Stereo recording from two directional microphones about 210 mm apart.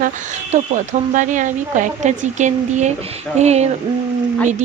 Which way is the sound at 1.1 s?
35° right (ahead or behind).